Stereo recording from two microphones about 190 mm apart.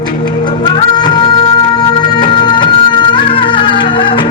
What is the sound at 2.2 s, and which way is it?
Music, 25° left (ahead or behind).